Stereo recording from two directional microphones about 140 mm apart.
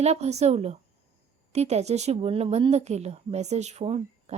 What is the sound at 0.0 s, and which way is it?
Speech, 50° right (ahead or behind).